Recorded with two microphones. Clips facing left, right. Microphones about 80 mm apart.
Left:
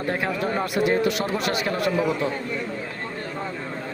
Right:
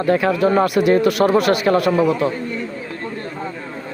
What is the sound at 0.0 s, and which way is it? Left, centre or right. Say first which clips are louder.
Speech: right 9 dB; right.